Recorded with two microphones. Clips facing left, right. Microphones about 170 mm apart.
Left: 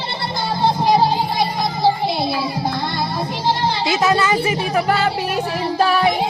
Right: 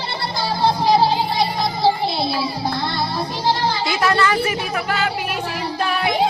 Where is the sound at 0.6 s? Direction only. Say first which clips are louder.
Even; 20° left (ahead or behind).